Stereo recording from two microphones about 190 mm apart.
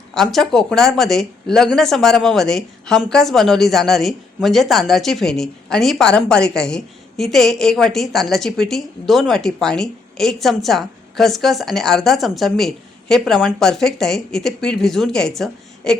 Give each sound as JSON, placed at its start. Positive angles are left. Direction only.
{"t": 0.1, "sound": "speech", "side_deg": 0}